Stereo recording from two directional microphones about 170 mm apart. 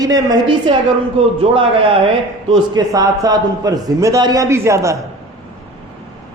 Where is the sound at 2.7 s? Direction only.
20° right (ahead or behind).